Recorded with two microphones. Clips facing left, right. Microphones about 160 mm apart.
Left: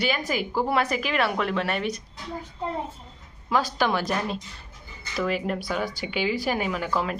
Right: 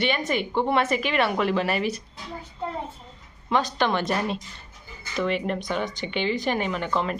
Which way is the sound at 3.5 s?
5° left (ahead or behind).